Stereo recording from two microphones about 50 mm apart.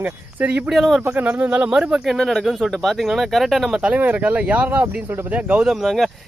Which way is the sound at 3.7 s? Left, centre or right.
Right.